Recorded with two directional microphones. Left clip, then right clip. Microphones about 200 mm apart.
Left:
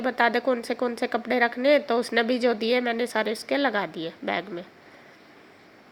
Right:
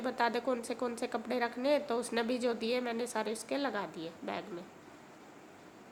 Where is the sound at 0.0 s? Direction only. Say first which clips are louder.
Left 10 dB; 20° left (ahead or behind).